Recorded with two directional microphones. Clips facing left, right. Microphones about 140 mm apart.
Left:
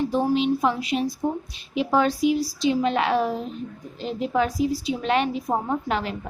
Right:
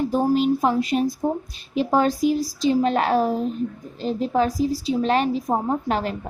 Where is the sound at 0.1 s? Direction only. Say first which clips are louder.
Right 2 dB; 45° right (ahead or behind).